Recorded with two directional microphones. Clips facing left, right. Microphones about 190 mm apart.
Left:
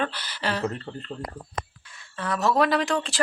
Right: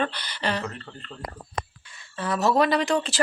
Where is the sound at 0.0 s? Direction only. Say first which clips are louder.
Right 1 dB; 5° left (ahead or behind).